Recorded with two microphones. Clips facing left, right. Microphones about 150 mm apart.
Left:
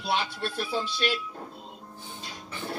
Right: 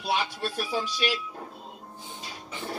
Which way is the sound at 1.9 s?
15° right (ahead or behind).